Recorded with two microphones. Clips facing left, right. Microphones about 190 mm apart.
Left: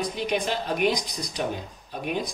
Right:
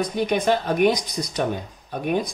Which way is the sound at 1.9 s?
55° right (ahead or behind).